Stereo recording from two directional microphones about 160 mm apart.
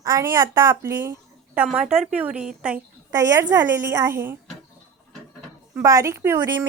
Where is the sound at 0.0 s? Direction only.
20° right (ahead or behind).